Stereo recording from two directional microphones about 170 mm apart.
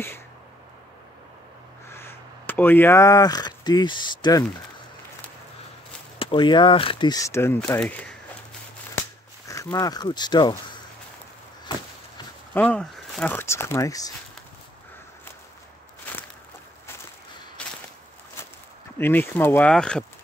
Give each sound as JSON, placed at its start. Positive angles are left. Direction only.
{"t": 1.9, "sound": "speech", "side_deg": 15}
{"t": 6.1, "sound": "speech", "side_deg": 30}
{"t": 7.8, "sound": "speech", "side_deg": 5}
{"t": 9.5, "sound": "speech", "side_deg": 20}
{"t": 12.5, "sound": "speech", "side_deg": 5}
{"t": 13.3, "sound": "speech", "side_deg": 15}
{"t": 17.6, "sound": "walk", "side_deg": 10}
{"t": 18.9, "sound": "speech", "side_deg": 10}